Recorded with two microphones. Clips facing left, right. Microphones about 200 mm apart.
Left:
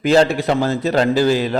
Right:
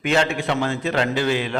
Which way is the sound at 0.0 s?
35° left (ahead or behind).